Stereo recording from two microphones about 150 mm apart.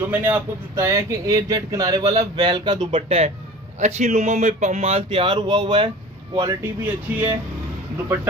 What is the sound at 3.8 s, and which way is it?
Speech, 50° right (ahead or behind).